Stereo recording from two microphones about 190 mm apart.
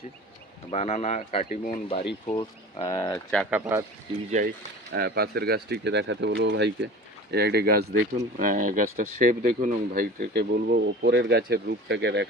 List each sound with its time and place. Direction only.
0.7 s speech: 35° left (ahead or behind)
3.3 s speech: 10° right (ahead or behind)
4.3 s speech: 40° right (ahead or behind)
4.9 s speech: 60° right (ahead or behind)